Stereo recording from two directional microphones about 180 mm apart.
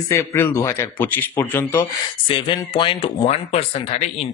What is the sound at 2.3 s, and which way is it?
Speech, 30° left (ahead or behind).